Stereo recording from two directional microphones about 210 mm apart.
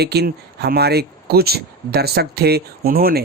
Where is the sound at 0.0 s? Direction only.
50° right (ahead or behind).